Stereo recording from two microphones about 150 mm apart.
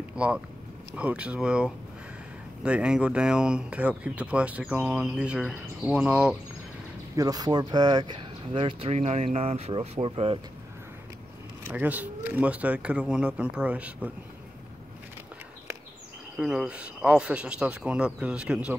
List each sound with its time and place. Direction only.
0.1 s vehicle: 5° right (ahead or behind)
0.9 s speech: 10° right (ahead or behind)
7.2 s speech: 25° right (ahead or behind)
8.9 s speech: 45° right (ahead or behind)
11.6 s speech: 10° right (ahead or behind)
16.3 s speech: 5° right (ahead or behind)